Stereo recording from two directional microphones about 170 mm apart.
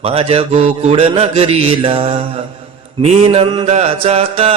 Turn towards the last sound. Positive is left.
turn(degrees=-35)  # may be behind; listen again after turning